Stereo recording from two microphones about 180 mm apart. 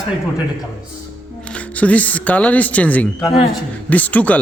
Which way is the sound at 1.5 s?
10° left (ahead or behind).